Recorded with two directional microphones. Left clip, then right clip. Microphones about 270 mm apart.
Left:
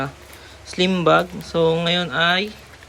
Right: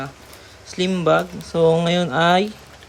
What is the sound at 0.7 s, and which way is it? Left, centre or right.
Speech, centre.